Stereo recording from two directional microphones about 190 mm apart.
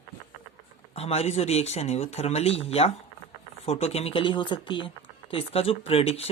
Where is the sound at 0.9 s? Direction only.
35° left (ahead or behind).